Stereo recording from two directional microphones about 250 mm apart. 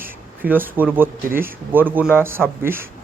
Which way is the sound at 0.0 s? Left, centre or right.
Centre.